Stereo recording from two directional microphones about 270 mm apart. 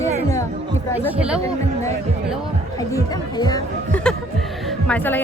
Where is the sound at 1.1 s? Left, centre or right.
Centre.